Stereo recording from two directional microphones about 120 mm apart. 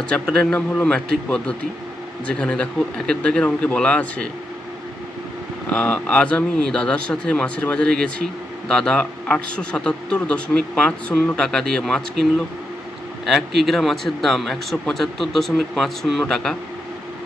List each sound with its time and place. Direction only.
0.0 s a man's voice: 10° left (ahead or behind)
5.7 s a man's voice: 10° left (ahead or behind)